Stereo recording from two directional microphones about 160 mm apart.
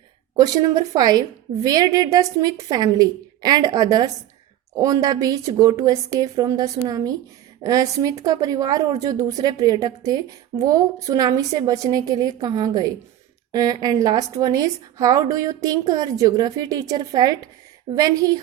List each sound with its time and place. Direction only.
0.3 s a woman's voice: 25° right (ahead or behind)